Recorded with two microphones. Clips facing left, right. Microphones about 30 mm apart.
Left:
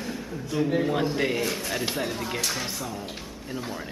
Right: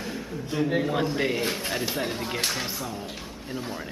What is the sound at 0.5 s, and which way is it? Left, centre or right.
Speech, centre.